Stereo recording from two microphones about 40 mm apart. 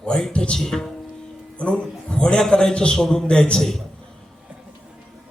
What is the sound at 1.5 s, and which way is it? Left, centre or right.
A man's voice, left.